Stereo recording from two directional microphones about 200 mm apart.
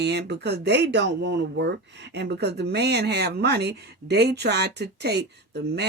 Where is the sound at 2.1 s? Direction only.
55° right (ahead or behind).